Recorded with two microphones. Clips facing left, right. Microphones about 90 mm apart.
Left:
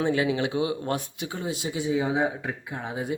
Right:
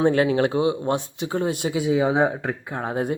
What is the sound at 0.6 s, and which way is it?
Speech, 25° right (ahead or behind).